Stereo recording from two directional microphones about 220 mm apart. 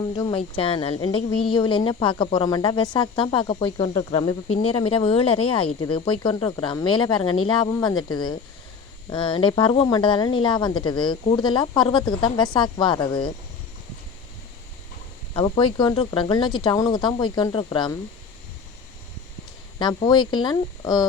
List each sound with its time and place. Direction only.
0.2 s speech: 20° left (ahead or behind)
15.3 s speech: 20° left (ahead or behind)
20.0 s speech: 20° left (ahead or behind)